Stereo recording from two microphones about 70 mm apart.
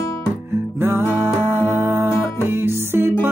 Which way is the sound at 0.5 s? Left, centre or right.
Right.